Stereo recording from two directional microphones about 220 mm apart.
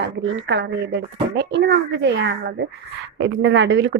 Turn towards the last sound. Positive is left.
turn(degrees=-55)  # may be behind; listen again after turning